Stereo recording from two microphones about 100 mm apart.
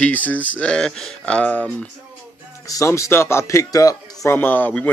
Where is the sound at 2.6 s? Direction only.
30° left (ahead or behind).